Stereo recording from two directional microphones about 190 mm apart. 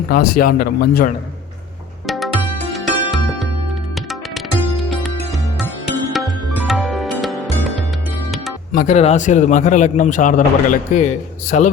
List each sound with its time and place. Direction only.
0.1 s speech: 50° left (ahead or behind)
2.0 s music: centre (ahead or behind)
8.7 s a man's voice: 40° left (ahead or behind)